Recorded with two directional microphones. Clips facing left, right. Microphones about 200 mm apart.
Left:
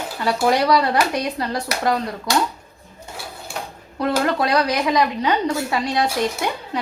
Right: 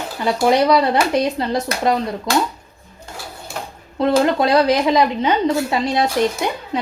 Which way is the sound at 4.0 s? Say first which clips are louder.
Right 4 dB; 25° right (ahead or behind).